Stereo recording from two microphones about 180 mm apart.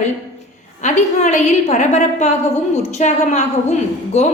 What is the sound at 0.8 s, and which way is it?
A woman's voice, 40° left (ahead or behind).